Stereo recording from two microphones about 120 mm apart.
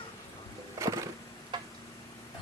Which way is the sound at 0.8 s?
30° right (ahead or behind).